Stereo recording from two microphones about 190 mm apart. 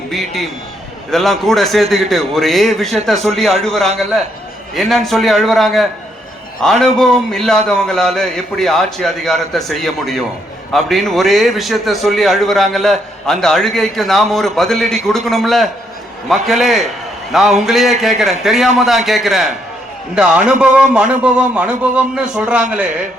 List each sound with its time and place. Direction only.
0.1 s a man's voice: centre (ahead or behind)